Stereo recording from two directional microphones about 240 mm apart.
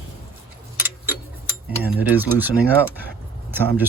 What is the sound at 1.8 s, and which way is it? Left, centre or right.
Speech, centre.